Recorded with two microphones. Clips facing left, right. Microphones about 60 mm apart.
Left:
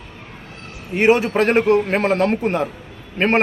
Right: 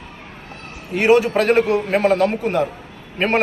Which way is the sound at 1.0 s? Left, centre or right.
Left.